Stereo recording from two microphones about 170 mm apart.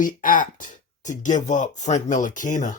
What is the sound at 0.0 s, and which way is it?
Speech, 55° left (ahead or behind).